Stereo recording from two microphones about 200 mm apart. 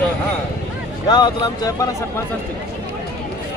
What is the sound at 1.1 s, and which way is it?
Speech, 20° left (ahead or behind).